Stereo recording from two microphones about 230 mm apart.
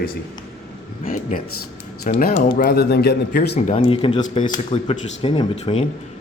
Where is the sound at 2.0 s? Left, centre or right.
Left.